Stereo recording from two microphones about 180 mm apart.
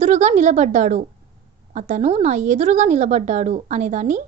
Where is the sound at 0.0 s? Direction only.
40° right (ahead or behind).